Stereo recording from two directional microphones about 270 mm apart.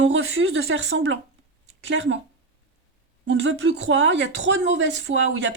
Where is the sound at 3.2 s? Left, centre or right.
Right.